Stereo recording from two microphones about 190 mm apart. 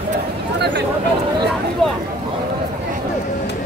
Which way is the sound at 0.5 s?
65° right (ahead or behind).